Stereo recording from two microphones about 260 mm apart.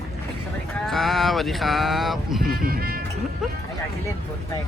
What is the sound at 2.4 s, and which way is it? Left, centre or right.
Music, right.